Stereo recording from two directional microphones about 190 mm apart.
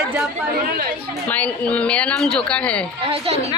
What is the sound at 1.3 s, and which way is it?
Speech, 5° left (ahead or behind).